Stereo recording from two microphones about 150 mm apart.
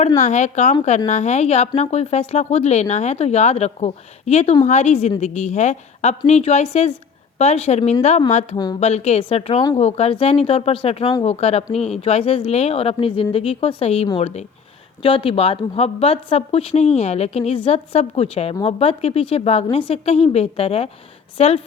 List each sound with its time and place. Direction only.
0.2 s a woman's voice: 50° left (ahead or behind)